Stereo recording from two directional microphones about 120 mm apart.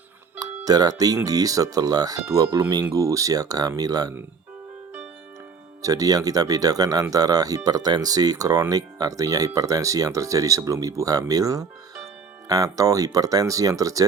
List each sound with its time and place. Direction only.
0.3 s speech: 35° right (ahead or behind)
5.8 s speech: 30° right (ahead or behind)